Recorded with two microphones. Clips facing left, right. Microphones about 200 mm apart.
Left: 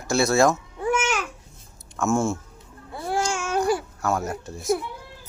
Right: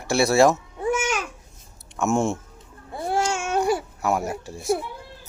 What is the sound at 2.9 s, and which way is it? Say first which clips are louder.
Babbling: right 2 dB; 25° right (ahead or behind).